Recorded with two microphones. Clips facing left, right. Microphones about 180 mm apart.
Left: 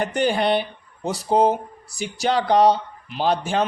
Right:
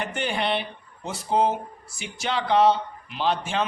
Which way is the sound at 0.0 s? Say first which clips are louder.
Left 7 dB; 40° left (ahead or behind).